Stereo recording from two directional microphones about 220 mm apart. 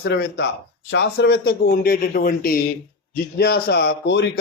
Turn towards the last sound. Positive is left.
turn(degrees=50)  # may be behind; listen again after turning